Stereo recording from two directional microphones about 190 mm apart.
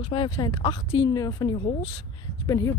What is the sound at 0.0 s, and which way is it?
Speech, 25° left (ahead or behind).